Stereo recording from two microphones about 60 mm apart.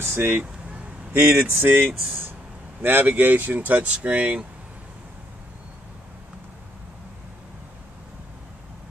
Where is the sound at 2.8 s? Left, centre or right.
Right.